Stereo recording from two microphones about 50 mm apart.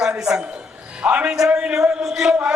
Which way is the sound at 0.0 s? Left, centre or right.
Centre.